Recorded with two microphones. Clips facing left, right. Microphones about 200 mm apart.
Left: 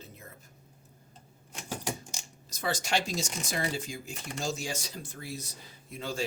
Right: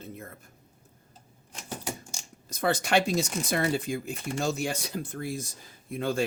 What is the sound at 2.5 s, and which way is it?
Speech, 55° right (ahead or behind).